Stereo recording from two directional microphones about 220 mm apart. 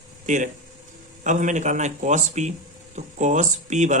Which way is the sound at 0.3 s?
35° right (ahead or behind).